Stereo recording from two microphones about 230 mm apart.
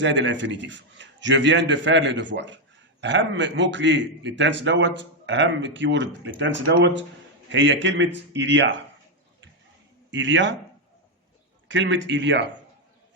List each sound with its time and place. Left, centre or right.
0.0 s a man's voice: right
10.1 s speech: right
11.7 s a man's voice: right